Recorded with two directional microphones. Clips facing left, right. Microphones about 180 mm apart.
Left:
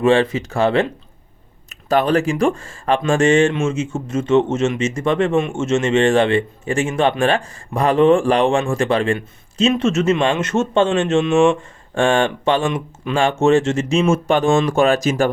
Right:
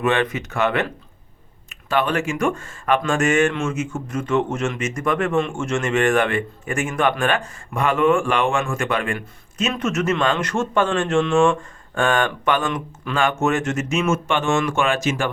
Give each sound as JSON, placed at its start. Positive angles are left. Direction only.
{"t": 0.0, "sound": "speech", "side_deg": 30}